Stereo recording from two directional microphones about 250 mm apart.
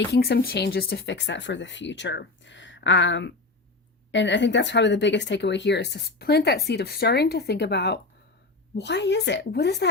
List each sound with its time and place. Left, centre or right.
0.1 s speech: left